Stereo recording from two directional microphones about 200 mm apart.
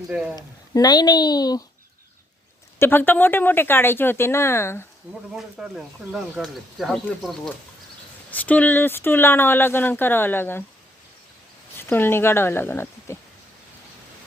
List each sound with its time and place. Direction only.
0.1 s speech: 5° right (ahead or behind)
0.3 s speech: 20° left (ahead or behind)
2.7 s speech: 10° left (ahead or behind)
5.3 s speech: centre (ahead or behind)
11.8 s speech: 10° left (ahead or behind)